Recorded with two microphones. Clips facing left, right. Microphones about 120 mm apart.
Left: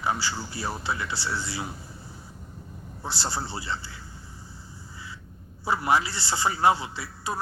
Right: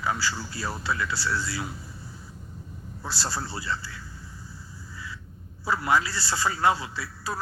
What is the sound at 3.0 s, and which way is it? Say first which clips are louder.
A man's voice: left 1 dB; 25° left (ahead or behind).